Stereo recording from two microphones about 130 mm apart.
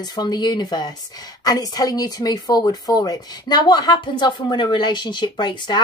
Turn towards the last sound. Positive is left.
turn(degrees=35)  # may be behind; listen again after turning